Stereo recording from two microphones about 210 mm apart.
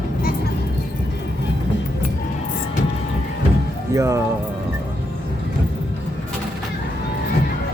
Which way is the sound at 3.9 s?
15° right (ahead or behind).